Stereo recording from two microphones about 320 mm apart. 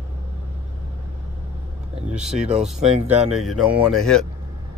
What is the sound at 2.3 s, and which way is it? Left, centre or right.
Speech, right.